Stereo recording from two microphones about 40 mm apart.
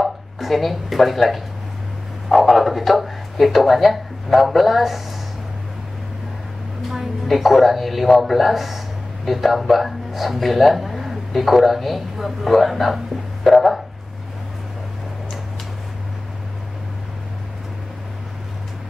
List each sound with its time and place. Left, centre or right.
0.0 s speech: centre
7.2 s a man's voice: centre